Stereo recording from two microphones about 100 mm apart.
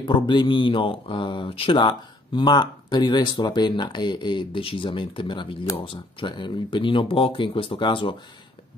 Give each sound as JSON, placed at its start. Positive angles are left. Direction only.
{"t": 0.0, "sound": "speech", "side_deg": 50}
{"t": 1.8, "sound": "speech", "side_deg": 50}